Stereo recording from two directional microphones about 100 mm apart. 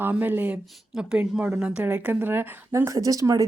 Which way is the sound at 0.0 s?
20° right (ahead or behind).